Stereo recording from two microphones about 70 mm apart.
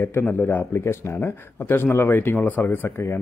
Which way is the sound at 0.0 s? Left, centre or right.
Left.